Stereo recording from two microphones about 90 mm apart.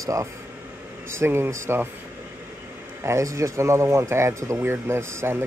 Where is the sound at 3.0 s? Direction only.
35° right (ahead or behind).